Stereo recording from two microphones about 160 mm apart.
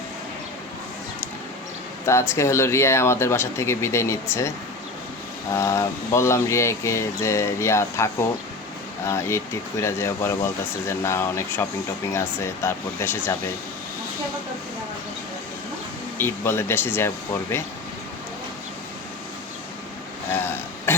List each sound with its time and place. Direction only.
2.0 s speech: 15° left (ahead or behind)
5.5 s speech: 20° left (ahead or behind)
16.1 s speech: 15° left (ahead or behind)
20.3 s throat clearing: 15° left (ahead or behind)